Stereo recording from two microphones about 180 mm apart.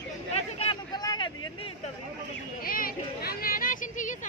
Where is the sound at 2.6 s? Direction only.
55° left (ahead or behind).